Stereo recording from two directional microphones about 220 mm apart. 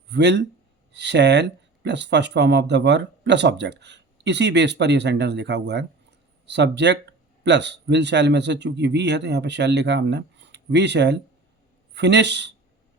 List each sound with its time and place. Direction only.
0.1 s speech: 50° right (ahead or behind)